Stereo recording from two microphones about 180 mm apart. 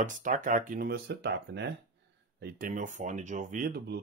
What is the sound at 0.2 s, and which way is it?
Speech, 45° right (ahead or behind).